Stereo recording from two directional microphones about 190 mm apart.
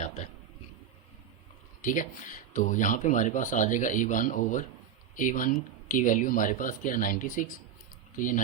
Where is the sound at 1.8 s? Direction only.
45° left (ahead or behind).